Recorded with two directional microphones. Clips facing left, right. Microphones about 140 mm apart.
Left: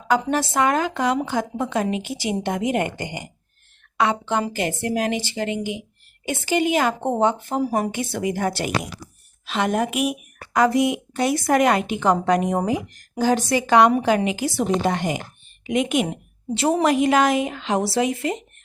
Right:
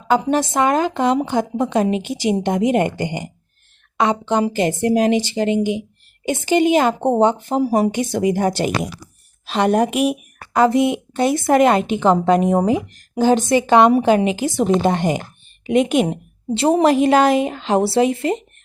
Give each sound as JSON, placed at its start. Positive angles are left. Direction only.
{"t": 0.1, "sound": "a woman's voice", "side_deg": -20}
{"t": 9.5, "sound": "a woman's voice", "side_deg": -35}